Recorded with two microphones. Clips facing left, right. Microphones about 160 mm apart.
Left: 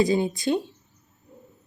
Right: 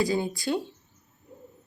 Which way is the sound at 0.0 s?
20° left (ahead or behind).